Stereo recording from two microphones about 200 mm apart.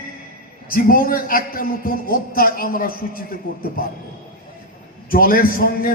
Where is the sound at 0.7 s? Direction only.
45° left (ahead or behind).